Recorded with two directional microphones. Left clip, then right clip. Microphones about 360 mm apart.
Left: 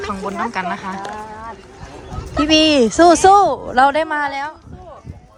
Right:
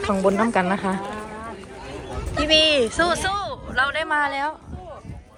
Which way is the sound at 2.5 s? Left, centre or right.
Centre.